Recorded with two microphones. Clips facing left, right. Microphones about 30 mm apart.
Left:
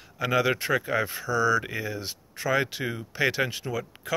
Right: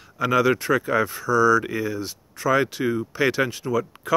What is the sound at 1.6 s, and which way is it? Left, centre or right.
Speech, centre.